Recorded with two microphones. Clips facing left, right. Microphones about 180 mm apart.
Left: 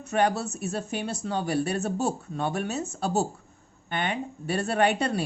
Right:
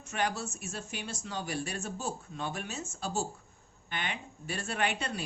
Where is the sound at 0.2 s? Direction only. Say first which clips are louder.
Left 9 dB; 60° left (ahead or behind).